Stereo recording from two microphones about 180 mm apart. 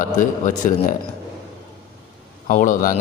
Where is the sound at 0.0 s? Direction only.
45° left (ahead or behind).